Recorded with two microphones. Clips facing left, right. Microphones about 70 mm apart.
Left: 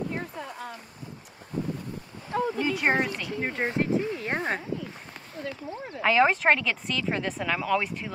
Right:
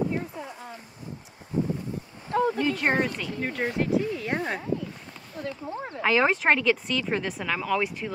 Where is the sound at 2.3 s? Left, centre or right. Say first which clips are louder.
Right 3 dB; right.